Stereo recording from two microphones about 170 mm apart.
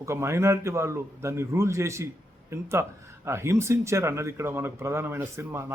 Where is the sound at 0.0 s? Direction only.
15° right (ahead or behind).